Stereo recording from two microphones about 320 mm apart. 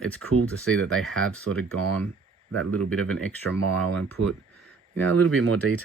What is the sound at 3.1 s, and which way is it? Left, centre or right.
Speech, centre.